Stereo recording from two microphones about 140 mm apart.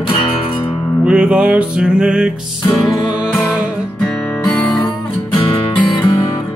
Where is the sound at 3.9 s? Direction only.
10° left (ahead or behind).